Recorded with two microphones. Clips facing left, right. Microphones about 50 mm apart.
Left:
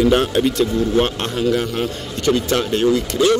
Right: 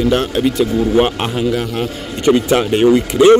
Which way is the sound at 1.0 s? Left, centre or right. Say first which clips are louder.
Right 4 dB; centre.